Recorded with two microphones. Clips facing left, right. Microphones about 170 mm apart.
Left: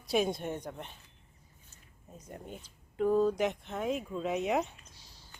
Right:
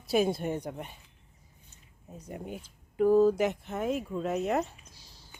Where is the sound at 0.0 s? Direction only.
5° right (ahead or behind).